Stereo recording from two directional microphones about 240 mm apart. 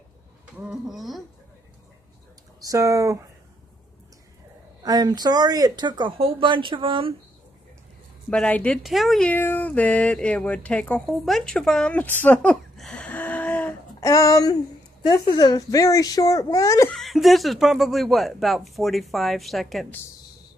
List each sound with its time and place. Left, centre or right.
0.6 s speech: centre
2.6 s speech: centre
4.8 s speech: centre
8.3 s speech: centre
12.2 s a sound: centre
15.0 s a woman's voice: centre
16.9 s speech: centre